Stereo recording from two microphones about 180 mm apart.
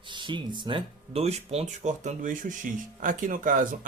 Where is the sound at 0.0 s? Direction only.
25° right (ahead or behind).